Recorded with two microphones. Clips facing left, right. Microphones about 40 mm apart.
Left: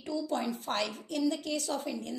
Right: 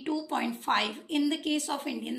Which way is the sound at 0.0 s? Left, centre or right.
Right.